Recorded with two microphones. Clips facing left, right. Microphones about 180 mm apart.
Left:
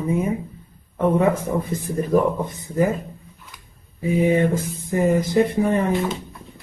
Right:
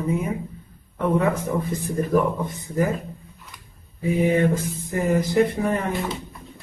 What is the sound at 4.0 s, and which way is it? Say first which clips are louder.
Speech: left 2 dB; 20° left (ahead or behind).